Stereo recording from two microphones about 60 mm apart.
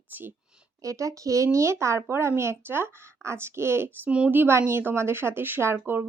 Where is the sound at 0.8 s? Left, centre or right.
Right.